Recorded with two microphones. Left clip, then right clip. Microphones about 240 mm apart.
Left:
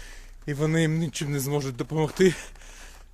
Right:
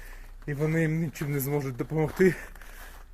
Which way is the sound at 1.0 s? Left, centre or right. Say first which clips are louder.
Left 2 dB; left.